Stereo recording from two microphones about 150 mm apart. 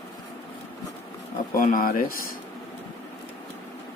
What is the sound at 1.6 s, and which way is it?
Speech, 70° left (ahead or behind).